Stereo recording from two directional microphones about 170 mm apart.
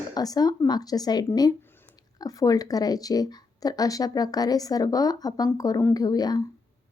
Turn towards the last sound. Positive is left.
turn(degrees=25)  # may be behind; listen again after turning